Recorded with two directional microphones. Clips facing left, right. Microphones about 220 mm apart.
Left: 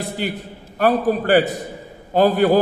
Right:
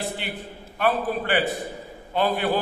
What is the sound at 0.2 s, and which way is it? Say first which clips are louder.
A man's voice: left 8 dB; 40° left (ahead or behind).